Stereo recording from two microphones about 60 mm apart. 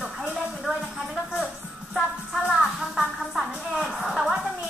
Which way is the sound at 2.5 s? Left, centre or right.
Centre.